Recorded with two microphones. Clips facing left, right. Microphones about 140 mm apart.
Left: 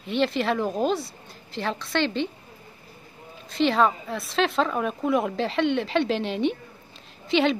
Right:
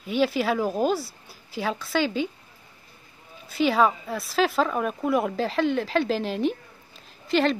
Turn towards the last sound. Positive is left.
turn(degrees=0)  # may be behind; listen again after turning